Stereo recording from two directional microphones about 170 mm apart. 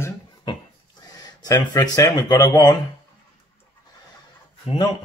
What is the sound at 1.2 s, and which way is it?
Mantra, 20° left (ahead or behind).